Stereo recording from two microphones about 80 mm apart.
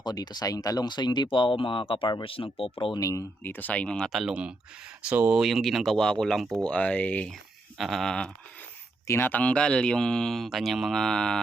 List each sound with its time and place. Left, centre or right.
0.0 s speech: left
2.7 s speech: left
3.0 s speech: left
3.4 s speech: left
4.1 s speech: centre
5.0 s speech: right
5.3 s speech: centre
6.7 s speech: centre
7.8 s speech: centre
9.0 s speech: left; by 11.3 s centre